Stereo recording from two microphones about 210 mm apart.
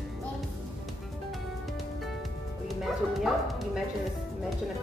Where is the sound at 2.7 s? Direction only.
Centre (ahead or behind).